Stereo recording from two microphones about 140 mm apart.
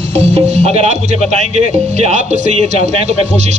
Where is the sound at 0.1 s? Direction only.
50° right (ahead or behind).